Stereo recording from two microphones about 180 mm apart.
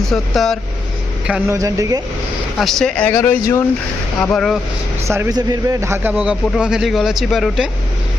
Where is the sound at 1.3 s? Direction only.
15° right (ahead or behind).